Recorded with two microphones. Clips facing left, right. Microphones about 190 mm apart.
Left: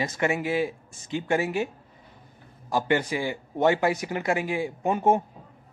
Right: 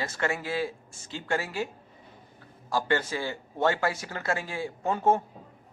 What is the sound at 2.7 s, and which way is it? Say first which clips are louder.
Speech: left 3 dB; 15° left (ahead or behind).